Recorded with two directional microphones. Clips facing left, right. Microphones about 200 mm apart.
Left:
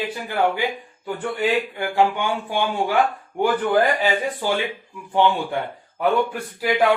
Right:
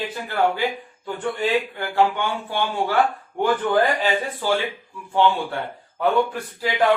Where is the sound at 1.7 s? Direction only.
15° left (ahead or behind).